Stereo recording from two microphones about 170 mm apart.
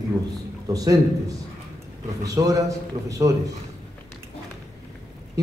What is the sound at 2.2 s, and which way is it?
Speech, 20° right (ahead or behind).